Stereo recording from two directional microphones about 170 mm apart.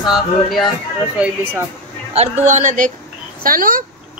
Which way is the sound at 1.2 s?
15° right (ahead or behind).